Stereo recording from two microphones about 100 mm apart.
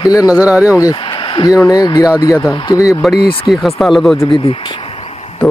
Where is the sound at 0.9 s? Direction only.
55° left (ahead or behind).